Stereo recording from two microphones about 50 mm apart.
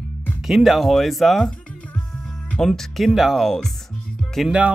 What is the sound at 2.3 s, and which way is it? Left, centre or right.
Music, left.